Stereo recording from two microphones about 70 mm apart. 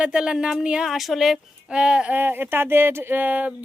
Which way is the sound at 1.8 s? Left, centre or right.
Centre.